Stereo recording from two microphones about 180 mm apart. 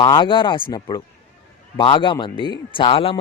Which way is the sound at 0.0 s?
25° left (ahead or behind).